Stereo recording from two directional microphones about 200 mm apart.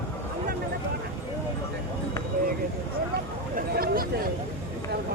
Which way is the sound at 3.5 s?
45° right (ahead or behind).